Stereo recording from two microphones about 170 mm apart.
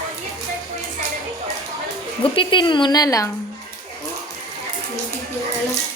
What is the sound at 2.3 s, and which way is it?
Speech, 30° left (ahead or behind).